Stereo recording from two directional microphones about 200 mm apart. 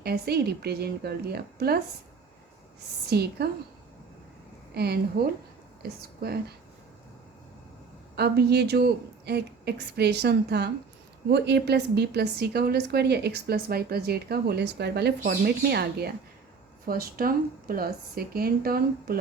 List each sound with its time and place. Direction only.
0.0 s speech: 50° right (ahead or behind)
3.1 s speech: 55° right (ahead or behind)
4.7 s speech: 50° right (ahead or behind)
8.1 s a woman's voice: 55° right (ahead or behind)